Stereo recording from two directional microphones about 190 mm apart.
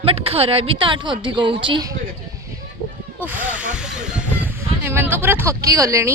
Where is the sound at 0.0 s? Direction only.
30° right (ahead or behind).